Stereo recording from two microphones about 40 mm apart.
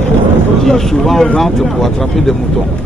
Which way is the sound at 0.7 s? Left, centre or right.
Centre.